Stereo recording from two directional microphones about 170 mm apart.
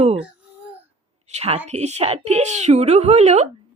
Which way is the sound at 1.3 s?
35° right (ahead or behind).